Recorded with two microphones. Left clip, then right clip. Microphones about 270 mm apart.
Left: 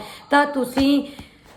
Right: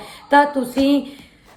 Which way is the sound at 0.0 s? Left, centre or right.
Centre.